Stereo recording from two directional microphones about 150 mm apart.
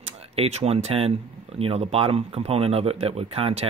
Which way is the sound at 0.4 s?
45° right (ahead or behind).